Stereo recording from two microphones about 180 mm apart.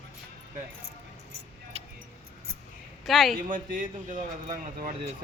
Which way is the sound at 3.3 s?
50° right (ahead or behind).